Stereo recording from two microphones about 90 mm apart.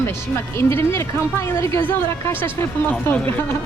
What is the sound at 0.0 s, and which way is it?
Speech, 30° left (ahead or behind).